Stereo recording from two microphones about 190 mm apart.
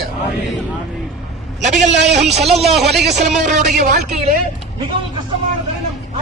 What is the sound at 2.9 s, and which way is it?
Speech, 60° right (ahead or behind).